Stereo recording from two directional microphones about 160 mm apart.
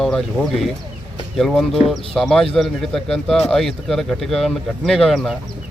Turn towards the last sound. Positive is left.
turn(degrees=0)  # may be behind; listen again after turning